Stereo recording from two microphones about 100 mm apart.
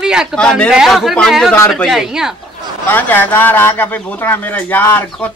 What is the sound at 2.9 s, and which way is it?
Speech, 20° left (ahead or behind).